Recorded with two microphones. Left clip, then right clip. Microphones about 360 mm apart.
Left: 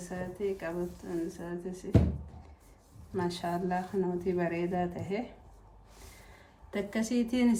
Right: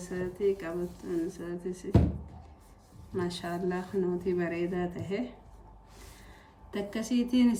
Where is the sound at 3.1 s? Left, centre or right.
Centre.